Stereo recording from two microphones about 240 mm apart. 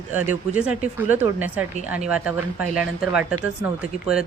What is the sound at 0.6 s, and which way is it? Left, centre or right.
A woman's voice, centre.